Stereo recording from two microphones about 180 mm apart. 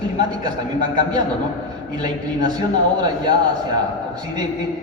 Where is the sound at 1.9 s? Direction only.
25° right (ahead or behind).